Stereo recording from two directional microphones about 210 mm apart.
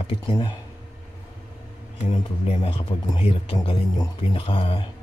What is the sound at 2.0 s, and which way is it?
Speech, 30° left (ahead or behind).